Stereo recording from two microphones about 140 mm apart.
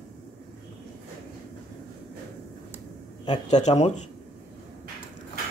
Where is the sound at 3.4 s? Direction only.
55° left (ahead or behind).